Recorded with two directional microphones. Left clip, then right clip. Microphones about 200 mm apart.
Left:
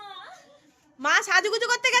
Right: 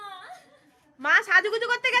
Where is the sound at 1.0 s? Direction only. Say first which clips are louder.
Right 1 dB; 25° left (ahead or behind).